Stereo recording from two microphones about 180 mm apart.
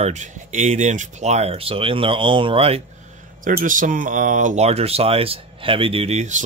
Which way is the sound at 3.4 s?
50° right (ahead or behind).